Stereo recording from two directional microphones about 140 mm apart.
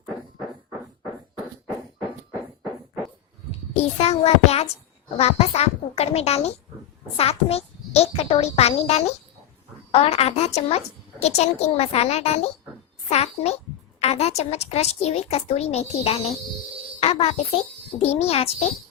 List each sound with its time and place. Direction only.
3.8 s a woman's voice: 45° left (ahead or behind)